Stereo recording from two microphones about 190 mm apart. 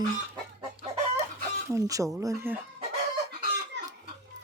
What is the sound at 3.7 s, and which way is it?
Chicken, 65° right (ahead or behind).